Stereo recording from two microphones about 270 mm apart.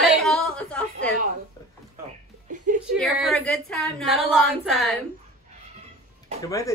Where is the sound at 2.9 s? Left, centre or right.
Centre.